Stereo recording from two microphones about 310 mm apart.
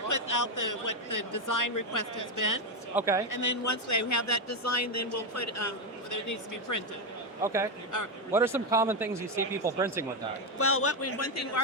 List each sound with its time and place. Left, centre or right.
0.1 s speech: left
2.9 s speech: centre
3.2 s speech: left
7.4 s speech: centre
7.9 s speech: left
8.3 s speech: centre
10.6 s a man's voice: left